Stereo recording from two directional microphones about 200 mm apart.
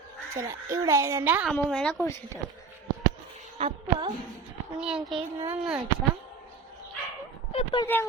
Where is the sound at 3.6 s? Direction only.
25° right (ahead or behind).